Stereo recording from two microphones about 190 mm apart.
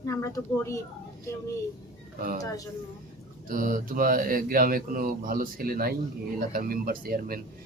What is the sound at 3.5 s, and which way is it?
Speech, 45° right (ahead or behind).